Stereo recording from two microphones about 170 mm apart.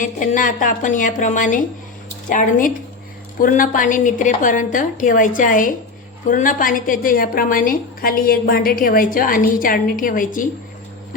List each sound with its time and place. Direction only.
0.0 s a woman's voice: 50° left (ahead or behind)